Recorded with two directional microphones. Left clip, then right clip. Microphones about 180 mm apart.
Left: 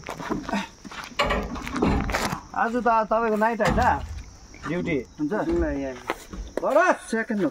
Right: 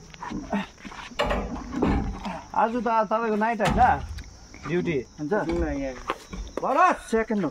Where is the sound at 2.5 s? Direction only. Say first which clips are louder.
Left 1 dB; 20° right (ahead or behind).